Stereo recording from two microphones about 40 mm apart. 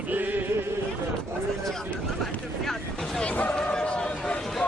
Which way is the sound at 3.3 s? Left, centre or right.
Left.